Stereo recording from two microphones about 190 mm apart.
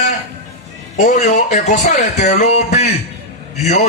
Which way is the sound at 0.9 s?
40° left (ahead or behind).